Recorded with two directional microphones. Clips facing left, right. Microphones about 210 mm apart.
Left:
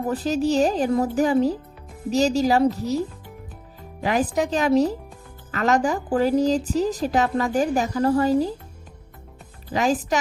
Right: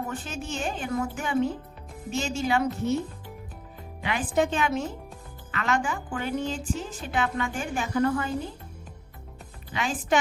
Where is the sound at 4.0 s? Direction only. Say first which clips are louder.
Left 4 dB; 40° left (ahead or behind).